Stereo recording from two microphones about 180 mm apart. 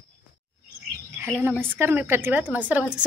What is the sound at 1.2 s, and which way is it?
A woman's voice, 10° right (ahead or behind).